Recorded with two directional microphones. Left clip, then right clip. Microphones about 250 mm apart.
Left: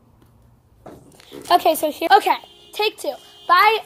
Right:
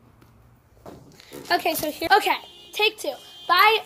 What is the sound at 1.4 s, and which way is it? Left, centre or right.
A woman's voice, centre.